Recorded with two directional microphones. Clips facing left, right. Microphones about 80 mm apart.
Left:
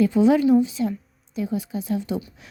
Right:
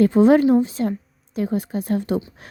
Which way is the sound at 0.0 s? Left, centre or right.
Right.